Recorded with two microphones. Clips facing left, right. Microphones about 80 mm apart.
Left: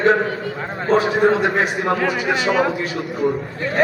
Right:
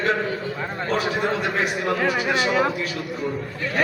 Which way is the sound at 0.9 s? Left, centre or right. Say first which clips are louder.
Left 8 dB; left.